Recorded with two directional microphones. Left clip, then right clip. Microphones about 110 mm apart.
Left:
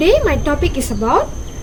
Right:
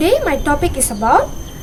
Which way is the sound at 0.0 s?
45° right (ahead or behind).